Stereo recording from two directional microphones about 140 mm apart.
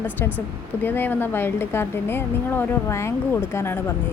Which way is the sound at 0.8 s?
15° left (ahead or behind).